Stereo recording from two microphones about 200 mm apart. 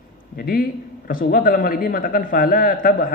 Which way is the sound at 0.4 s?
45° left (ahead or behind).